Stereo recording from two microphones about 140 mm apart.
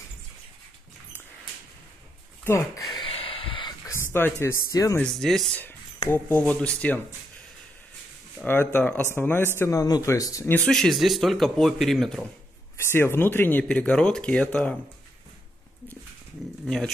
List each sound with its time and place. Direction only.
2.4 s a sound: 20° left (ahead or behind)
4.0 s speech: 15° left (ahead or behind)
5.0 s speech: 5° left (ahead or behind)
8.5 s speech: 15° left (ahead or behind)
10.7 s speech: centre (ahead or behind)
12.7 s speech: 15° left (ahead or behind)
16.6 s speech: 5° left (ahead or behind)